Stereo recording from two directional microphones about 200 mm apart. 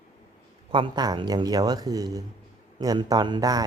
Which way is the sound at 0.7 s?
25° right (ahead or behind).